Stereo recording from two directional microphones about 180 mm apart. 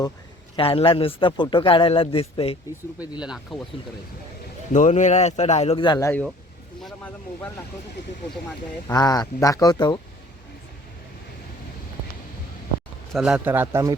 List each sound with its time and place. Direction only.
0.5 s a man's voice: 30° left (ahead or behind)
3.2 s speech: 5° right (ahead or behind)
4.7 s a man's voice: 40° left (ahead or behind); by 6.1 s 25° left (ahead or behind)
6.8 s speech: 5° left (ahead or behind)
8.9 s a man's voice: 20° left (ahead or behind)
13.1 s speech: 5° right (ahead or behind)